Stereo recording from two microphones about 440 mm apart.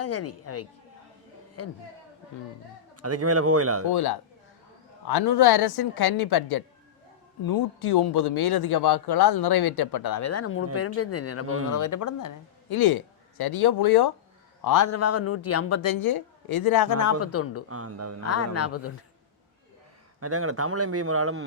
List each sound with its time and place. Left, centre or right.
0.0 s speech: left
2.9 s speech: right
3.8 s speech: left
11.4 s speech: right
11.7 s speech: left
12.7 s speech: left
14.6 s speech: left
16.0 s speech: left
17.0 s speech: left
17.7 s speech: right
18.3 s speech: left
20.1 s speech: right